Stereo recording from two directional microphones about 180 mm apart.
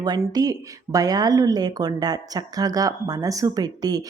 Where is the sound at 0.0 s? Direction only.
20° right (ahead or behind).